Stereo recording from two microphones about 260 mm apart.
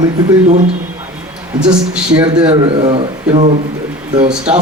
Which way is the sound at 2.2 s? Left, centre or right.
Centre.